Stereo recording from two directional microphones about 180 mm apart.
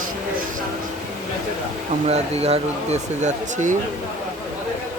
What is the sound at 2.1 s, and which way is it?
Speech, 35° right (ahead or behind).